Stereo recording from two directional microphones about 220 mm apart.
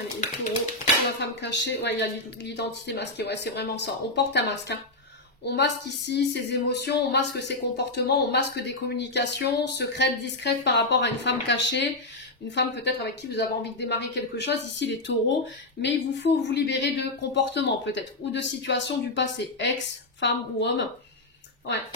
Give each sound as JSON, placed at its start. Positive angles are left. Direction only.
{"t": 1.2, "sound": "speech", "side_deg": 55}